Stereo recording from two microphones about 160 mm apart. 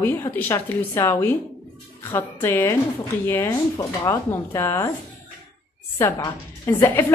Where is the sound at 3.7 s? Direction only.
25° left (ahead or behind).